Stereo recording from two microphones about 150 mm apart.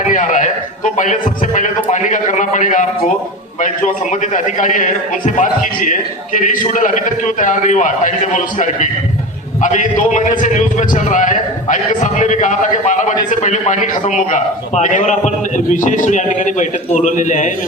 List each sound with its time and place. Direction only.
0.0 s a man's voice: 55° left (ahead or behind)
4.1 s a man's voice: 55° left (ahead or behind)